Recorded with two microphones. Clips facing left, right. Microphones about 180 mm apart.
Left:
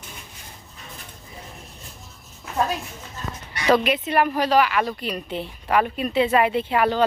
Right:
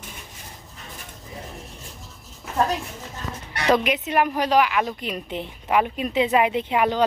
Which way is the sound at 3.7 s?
15° right (ahead or behind).